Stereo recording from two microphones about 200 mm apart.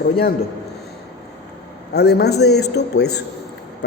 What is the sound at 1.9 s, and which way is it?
A man's voice, 55° left (ahead or behind).